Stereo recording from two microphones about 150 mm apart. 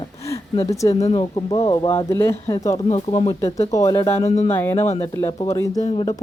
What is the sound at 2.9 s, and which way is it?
Speech, 35° left (ahead or behind).